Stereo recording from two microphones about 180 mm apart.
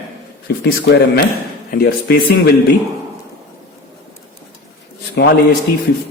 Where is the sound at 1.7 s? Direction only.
60° left (ahead or behind).